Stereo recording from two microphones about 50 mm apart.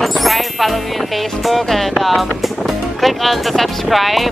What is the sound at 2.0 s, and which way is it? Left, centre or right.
Speech, centre.